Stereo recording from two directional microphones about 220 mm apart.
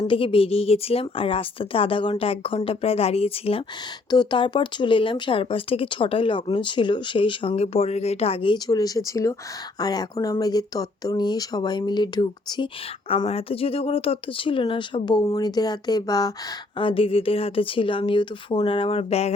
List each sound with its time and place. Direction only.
0.0 s speech: 25° left (ahead or behind)